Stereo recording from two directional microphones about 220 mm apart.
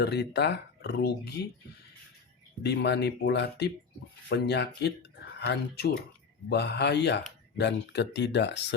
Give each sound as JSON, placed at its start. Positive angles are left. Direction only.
{"t": 0.0, "sound": "speech", "side_deg": 50}
{"t": 2.6, "sound": "speech", "side_deg": 50}